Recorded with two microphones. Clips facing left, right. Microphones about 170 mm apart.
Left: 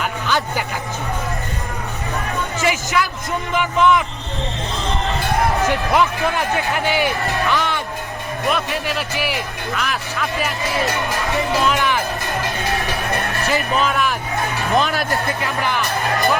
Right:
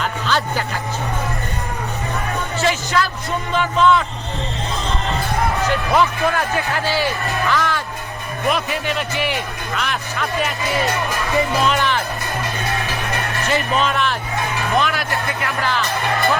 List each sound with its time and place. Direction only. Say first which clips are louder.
0.0 s speech: even; 15° left (ahead or behind)
2.6 s speech: right 1 dB; 15° left (ahead or behind)
5.6 s speech: even; 20° left (ahead or behind)
8.4 s speech: right 1 dB; centre (ahead or behind)
11.6 s speech: even; 5° left (ahead or behind)
13.5 s speech: even; 5° left (ahead or behind)
14.8 s speech: left 2 dB; 40° left (ahead or behind)
15.4 s speech: right 2 dB; 15° left (ahead or behind)